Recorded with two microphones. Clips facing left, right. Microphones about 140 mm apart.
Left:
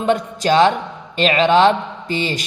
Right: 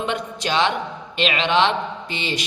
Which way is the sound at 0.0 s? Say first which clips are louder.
Left 7 dB; 40° left (ahead or behind).